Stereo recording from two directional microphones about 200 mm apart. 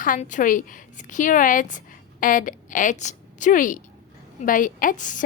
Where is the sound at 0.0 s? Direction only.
40° left (ahead or behind).